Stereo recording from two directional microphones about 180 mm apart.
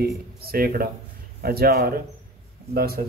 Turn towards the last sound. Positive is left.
turn(degrees=-60)  # may be behind; listen again after turning